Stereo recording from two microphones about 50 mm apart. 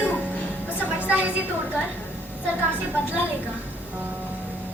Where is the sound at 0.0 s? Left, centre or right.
Right.